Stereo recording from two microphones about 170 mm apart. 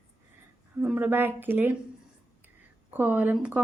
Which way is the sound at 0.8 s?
10° right (ahead or behind).